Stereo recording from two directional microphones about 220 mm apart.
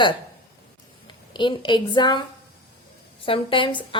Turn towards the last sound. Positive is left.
turn(degrees=25)  # may be behind; listen again after turning